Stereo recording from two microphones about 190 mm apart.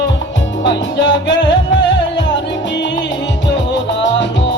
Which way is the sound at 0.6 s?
70° left (ahead or behind).